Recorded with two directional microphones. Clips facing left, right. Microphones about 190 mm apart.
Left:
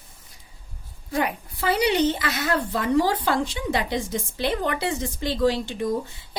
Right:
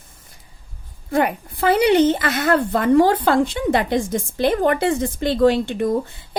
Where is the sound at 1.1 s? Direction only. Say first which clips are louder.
Right 6 dB; 55° right (ahead or behind).